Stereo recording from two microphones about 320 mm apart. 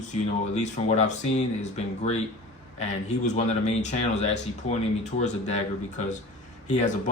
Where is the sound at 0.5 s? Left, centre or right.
Left.